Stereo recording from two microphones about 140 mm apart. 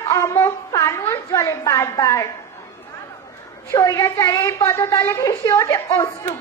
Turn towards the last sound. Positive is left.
turn(degrees=25)  # may be behind; listen again after turning